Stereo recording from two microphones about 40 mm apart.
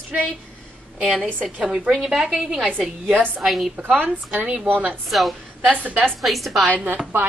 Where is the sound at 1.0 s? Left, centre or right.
Right.